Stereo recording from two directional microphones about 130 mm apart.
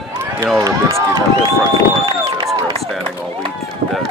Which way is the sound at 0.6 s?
30° right (ahead or behind).